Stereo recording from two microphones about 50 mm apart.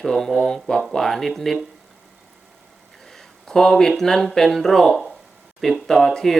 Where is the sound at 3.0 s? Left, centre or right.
Centre.